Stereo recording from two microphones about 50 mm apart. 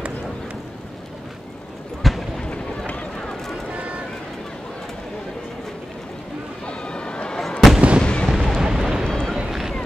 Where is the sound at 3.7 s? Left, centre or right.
Right.